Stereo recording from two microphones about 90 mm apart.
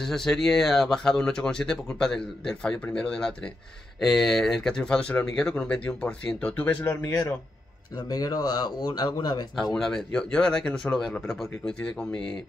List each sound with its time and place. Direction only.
0.0 s speech: 5° left (ahead or behind); by 7.3 s 30° left (ahead or behind)
8.1 s speech: 45° left (ahead or behind)
9.8 s speech: 5° left (ahead or behind)